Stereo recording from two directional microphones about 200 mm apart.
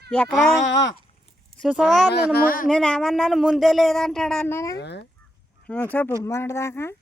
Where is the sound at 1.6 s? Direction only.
Centre (ahead or behind).